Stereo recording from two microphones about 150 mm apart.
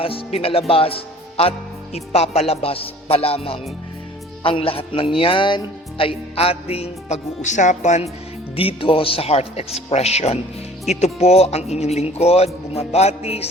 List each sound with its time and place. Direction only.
0.0 s speech: 40° left (ahead or behind)
8.5 s speech: 35° left (ahead or behind)